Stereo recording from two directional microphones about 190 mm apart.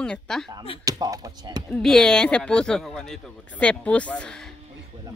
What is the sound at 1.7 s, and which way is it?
Speech, 5° left (ahead or behind).